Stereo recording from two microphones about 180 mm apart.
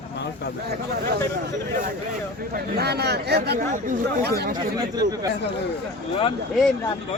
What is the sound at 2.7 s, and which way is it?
Speech, 65° right (ahead or behind).